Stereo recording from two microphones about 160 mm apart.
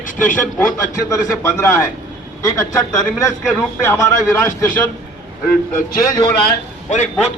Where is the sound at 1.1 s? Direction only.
20° left (ahead or behind).